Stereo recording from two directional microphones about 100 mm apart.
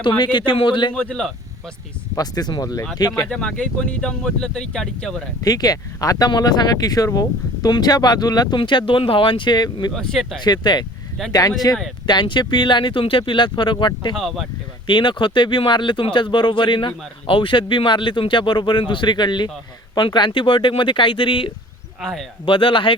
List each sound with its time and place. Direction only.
0.0 s speech: 50° left (ahead or behind)
0.9 s speech: 10° left (ahead or behind)
2.1 s speech: 40° left (ahead or behind)
3.2 s speech: 10° left (ahead or behind)
5.4 s speech: 40° left (ahead or behind)
9.9 s speech: 5° left (ahead or behind)
10.4 s speech: 45° left (ahead or behind)
12.0 s speech: 50° left (ahead or behind)
14.2 s speech: centre (ahead or behind)
14.8 s speech: 50° left (ahead or behind)
22.0 s speech: centre (ahead or behind)
22.4 s speech: 60° left (ahead or behind)